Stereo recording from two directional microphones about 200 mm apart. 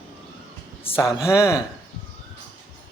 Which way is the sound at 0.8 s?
25° left (ahead or behind).